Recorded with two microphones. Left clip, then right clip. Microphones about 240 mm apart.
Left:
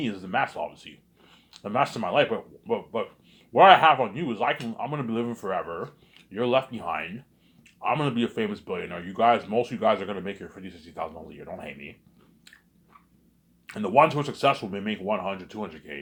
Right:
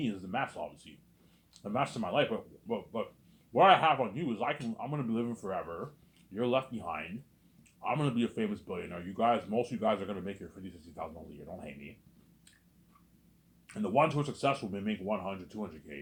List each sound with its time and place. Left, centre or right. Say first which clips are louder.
0.0 s speech: left 8 dB; left
13.7 s speech: left 9 dB; left